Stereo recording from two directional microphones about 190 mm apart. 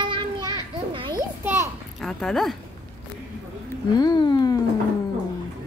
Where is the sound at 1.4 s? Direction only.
10° right (ahead or behind).